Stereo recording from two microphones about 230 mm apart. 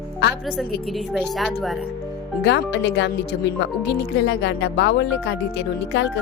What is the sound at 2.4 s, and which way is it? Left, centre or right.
A woman's voice, left.